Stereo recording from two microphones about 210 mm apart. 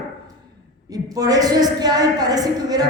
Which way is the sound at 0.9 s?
15° right (ahead or behind).